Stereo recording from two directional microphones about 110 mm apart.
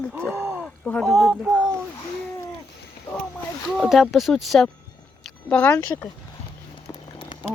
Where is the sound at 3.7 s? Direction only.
Centre (ahead or behind).